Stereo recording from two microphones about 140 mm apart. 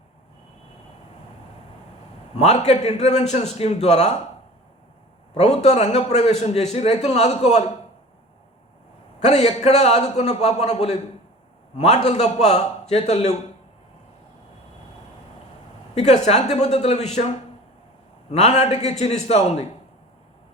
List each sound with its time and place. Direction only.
2.3 s a man's voice: 50° left (ahead or behind)
5.3 s a man's voice: 50° left (ahead or behind)
9.2 s a man's voice: 50° left (ahead or behind)
16.0 s a man's voice: 50° left (ahead or behind)